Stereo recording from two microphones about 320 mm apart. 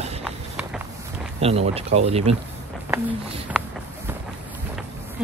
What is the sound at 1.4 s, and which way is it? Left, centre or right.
Speech, centre.